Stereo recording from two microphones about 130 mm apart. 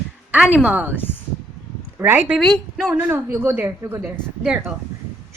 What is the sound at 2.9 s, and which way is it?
A woman's voice, 15° right (ahead or behind).